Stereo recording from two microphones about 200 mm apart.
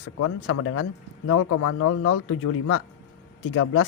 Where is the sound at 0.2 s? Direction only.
90° left.